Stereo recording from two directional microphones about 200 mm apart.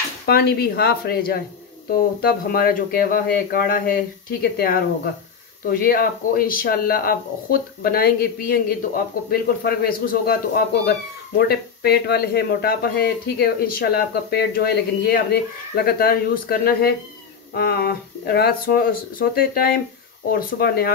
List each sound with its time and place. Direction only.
0.3 s speech: 55° left (ahead or behind)